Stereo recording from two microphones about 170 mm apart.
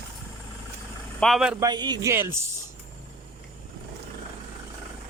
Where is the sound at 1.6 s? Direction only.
25° right (ahead or behind).